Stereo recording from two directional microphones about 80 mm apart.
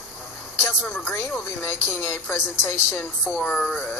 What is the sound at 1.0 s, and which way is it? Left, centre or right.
Speech, left.